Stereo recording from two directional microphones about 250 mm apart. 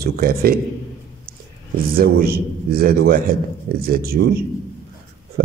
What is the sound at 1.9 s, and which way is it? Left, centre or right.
A man's voice, right.